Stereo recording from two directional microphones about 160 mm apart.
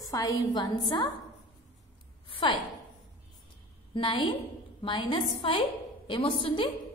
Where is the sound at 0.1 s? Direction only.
25° left (ahead or behind).